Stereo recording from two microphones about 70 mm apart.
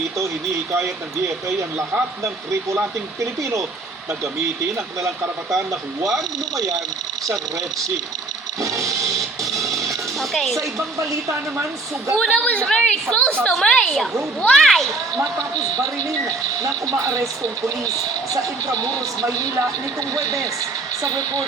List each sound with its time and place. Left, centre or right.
2.2 s a man's voice: right
8.6 s a sound: right
9.6 s music: right
10.2 s speech: centre
12.1 s a woman's voice: centre
15.2 s speech: right